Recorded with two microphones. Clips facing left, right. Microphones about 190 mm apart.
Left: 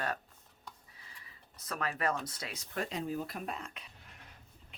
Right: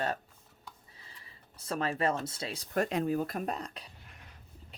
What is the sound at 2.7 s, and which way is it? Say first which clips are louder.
Speech: right 7 dB; 60° right (ahead or behind).